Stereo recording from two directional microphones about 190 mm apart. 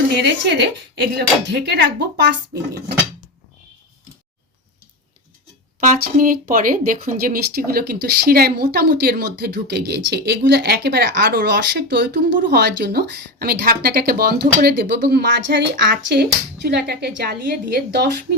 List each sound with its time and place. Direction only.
0.2 s speech: 60° right (ahead or behind)
5.8 s speech: 45° right (ahead or behind)